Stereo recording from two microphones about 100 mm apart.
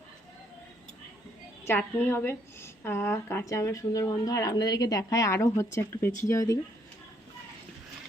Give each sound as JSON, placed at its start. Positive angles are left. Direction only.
{"t": 1.6, "sound": "a woman's voice", "side_deg": 20}